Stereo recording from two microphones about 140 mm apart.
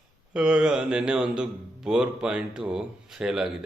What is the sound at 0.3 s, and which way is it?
Speech, 5° right (ahead or behind).